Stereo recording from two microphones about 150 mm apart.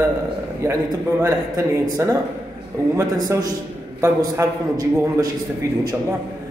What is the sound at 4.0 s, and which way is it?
Speech, 20° right (ahead or behind).